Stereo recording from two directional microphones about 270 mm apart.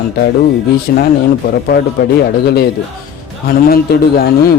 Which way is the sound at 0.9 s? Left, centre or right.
Left.